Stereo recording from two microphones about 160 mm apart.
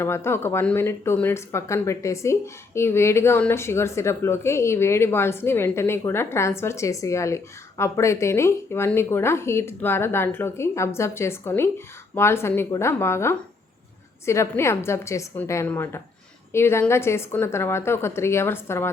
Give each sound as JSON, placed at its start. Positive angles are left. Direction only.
{"t": 0.0, "sound": "speech", "side_deg": 15}